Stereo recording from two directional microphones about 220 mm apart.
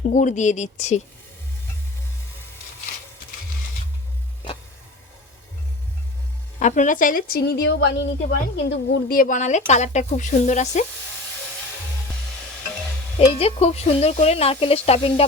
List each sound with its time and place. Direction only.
0.0 s a woman's voice: 35° left (ahead or behind)
6.6 s a woman's voice: 35° left (ahead or behind)
13.1 s speech: 30° left (ahead or behind)